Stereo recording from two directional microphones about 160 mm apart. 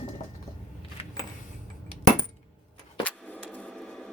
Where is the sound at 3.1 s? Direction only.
10° left (ahead or behind).